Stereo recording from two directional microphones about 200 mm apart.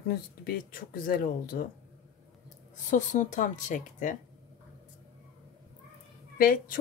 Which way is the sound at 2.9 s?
40° left (ahead or behind).